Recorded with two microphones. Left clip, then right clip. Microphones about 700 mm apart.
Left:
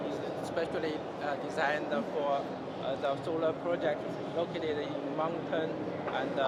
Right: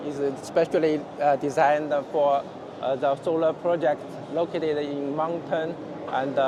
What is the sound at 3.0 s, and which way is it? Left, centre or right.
Speech, right.